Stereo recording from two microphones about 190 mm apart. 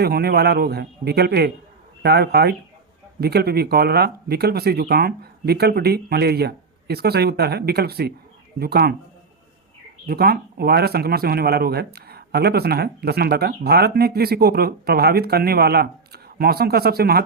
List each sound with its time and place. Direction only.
0.0 s speech: 55° right (ahead or behind)
10.1 s speech: 55° right (ahead or behind)